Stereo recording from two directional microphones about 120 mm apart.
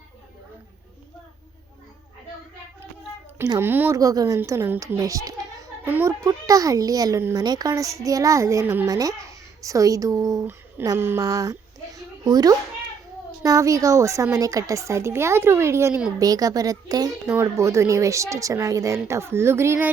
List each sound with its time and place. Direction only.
3.6 s speech: 20° right (ahead or behind)
3.9 s a woman's voice: 30° right (ahead or behind)
5.8 s speech: 15° right (ahead or behind)
6.2 s a woman's voice: 30° right (ahead or behind)
8.9 s a woman's voice: 30° right (ahead or behind)
10.9 s a woman's voice: 20° right (ahead or behind)
11.2 s a woman's voice: 30° right (ahead or behind)